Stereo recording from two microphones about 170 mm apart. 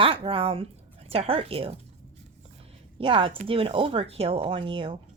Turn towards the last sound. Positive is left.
turn(degrees=-30)  # may be behind; listen again after turning